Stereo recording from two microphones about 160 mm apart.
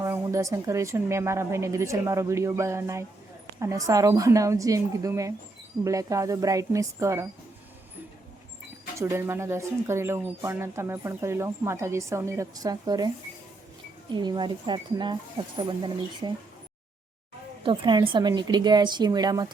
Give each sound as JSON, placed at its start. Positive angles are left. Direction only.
{"t": 0.0, "sound": "speech", "side_deg": -20}
{"t": 9.0, "sound": "speech", "side_deg": -15}
{"t": 14.1, "sound": "speech", "side_deg": -30}
{"t": 17.6, "sound": "speech", "side_deg": -30}